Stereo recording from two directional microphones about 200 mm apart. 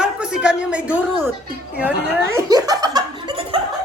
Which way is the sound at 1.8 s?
10° right (ahead or behind).